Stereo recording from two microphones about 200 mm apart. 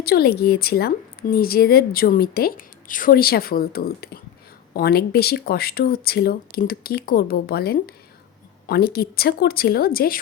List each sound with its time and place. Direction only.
0.0 s a woman's voice: 50° left (ahead or behind)